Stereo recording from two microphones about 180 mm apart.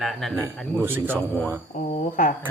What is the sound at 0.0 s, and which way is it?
Speech, centre (ahead or behind).